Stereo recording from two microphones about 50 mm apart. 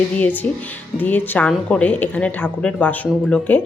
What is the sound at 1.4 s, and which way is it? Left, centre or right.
Speech, left.